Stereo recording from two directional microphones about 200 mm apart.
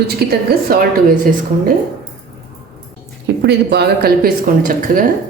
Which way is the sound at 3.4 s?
55° right (ahead or behind).